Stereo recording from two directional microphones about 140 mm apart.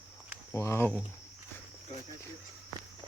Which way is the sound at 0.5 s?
20° left (ahead or behind).